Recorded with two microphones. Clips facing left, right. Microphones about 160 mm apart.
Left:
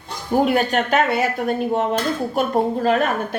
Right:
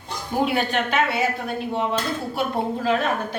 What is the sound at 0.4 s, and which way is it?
Speech, 45° left (ahead or behind).